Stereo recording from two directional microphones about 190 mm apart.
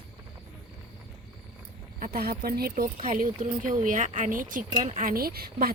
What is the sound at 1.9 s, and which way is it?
Speech, 45° right (ahead or behind).